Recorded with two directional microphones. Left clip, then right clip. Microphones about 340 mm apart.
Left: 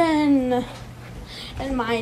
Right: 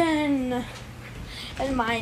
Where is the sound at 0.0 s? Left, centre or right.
Centre.